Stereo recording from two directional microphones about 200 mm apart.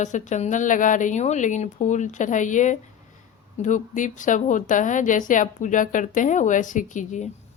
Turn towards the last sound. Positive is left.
turn(degrees=40)  # may be behind; listen again after turning